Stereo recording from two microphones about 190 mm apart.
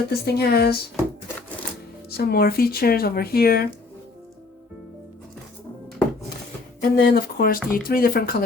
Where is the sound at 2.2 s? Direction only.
55° left (ahead or behind).